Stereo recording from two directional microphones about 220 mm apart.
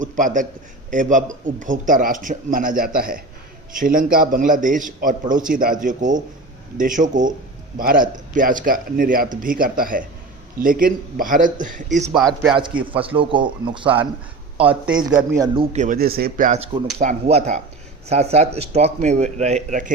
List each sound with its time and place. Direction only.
0.0 s a man's voice: 35° right (ahead or behind)
12.1 s a man's voice: centre (ahead or behind)
12.5 s a man's voice: 20° right (ahead or behind)
14.6 s a man's voice: 5° right (ahead or behind)
15.4 s speech: 25° right (ahead or behind)